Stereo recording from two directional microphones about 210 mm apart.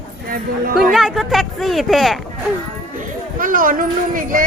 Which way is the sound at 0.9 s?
Centre (ahead or behind).